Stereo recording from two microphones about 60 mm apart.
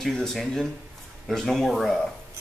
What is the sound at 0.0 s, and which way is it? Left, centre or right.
Speech, centre.